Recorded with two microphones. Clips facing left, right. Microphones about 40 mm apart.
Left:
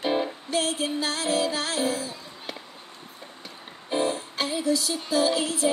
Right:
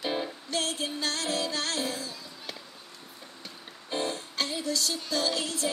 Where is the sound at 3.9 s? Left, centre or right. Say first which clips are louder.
Left 6 dB; centre.